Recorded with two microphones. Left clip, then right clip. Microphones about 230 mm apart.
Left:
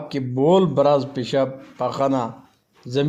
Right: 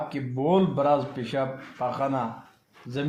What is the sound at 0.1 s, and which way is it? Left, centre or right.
A man's voice, left.